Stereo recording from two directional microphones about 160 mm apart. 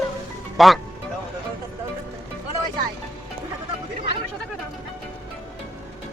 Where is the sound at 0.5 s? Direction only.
Centre (ahead or behind).